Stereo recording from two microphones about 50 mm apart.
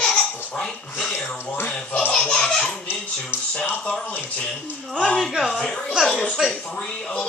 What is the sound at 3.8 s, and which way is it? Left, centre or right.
Speech, centre.